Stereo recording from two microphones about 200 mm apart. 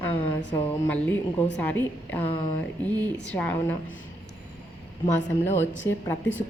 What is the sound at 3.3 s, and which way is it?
Speech, 10° left (ahead or behind).